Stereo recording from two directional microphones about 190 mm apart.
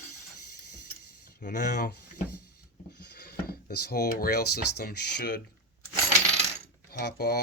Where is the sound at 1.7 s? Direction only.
55° left (ahead or behind).